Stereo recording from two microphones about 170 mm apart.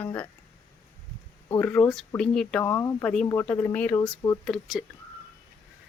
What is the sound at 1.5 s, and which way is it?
Speech, 10° left (ahead or behind).